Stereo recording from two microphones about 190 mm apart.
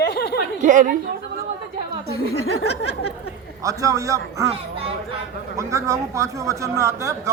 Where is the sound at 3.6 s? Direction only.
15° right (ahead or behind).